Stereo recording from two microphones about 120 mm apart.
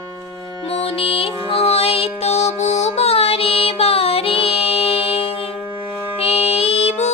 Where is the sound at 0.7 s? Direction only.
55° left (ahead or behind).